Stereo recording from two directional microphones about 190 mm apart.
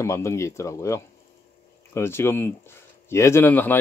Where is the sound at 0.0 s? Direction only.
15° left (ahead or behind).